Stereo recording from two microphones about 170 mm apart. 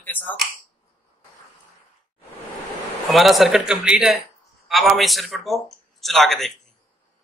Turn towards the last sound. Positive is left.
turn(degrees=0)  # may be behind; listen again after turning